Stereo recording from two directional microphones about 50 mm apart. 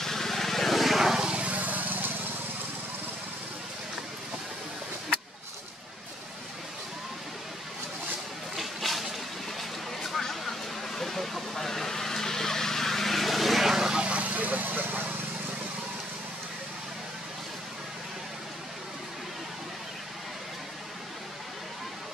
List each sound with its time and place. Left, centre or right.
0.0 s vehicle: centre
1.1 s vehicle: centre; by 2.1 s right
8.5 s a sound: centre
9.6 s vehicle: centre
14.0 s vehicle: right